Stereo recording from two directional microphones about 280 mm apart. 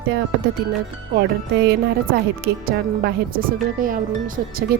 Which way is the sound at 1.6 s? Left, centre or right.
Right.